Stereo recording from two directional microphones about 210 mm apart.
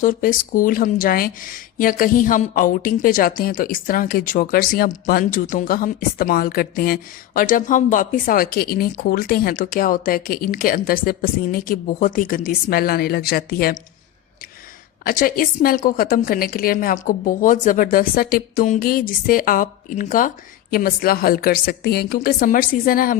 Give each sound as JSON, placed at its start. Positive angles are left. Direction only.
{"t": 0.0, "sound": "speech", "side_deg": 40}
{"t": 15.0, "sound": "a woman's voice", "side_deg": 40}